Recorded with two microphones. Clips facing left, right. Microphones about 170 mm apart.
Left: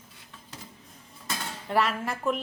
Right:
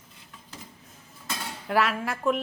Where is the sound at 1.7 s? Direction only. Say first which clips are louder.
Right 1 dB; centre (ahead or behind).